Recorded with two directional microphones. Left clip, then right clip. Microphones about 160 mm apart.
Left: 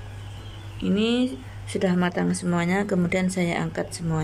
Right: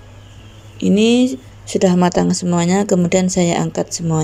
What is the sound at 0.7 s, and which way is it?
Speech, 30° right (ahead or behind).